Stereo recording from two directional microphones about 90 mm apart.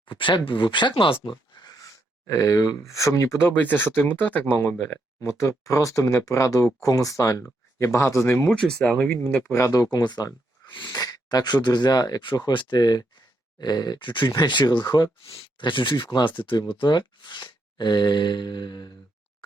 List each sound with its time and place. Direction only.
0.0 s speech: 70° left (ahead or behind); by 3.4 s 35° left (ahead or behind)
3.4 s speech: 25° left (ahead or behind)
5.2 s speech: 35° left (ahead or behind)
8.4 s speech: 5° left (ahead or behind)
9.4 s speech: 30° left (ahead or behind); by 18.9 s 55° left (ahead or behind)